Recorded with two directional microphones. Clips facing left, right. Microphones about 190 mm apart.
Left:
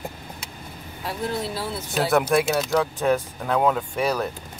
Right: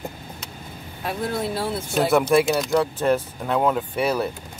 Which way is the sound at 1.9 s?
Centre (ahead or behind).